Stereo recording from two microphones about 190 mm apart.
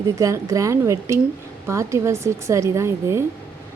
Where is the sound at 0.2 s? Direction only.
15° right (ahead or behind).